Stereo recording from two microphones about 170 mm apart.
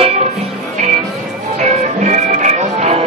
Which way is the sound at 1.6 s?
45° right (ahead or behind).